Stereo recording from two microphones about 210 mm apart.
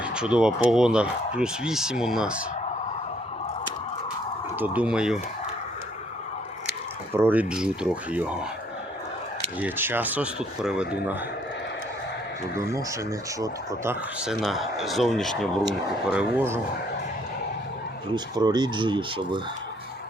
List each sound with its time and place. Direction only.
0.0 s speech: 5° right (ahead or behind)
4.6 s speech: 5° right (ahead or behind)
7.1 s speech: 10° right (ahead or behind)
9.6 s speech: 10° right (ahead or behind)
12.5 s speech: 15° right (ahead or behind)
14.2 s speech: centre (ahead or behind)
16.1 s speech: 10° right (ahead or behind)
18.1 s speech: 20° right (ahead or behind)